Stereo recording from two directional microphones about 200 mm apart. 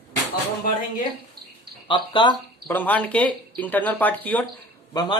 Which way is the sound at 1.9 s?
25° left (ahead or behind).